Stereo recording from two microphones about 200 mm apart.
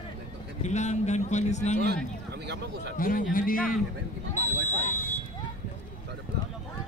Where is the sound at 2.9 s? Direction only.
45° left (ahead or behind).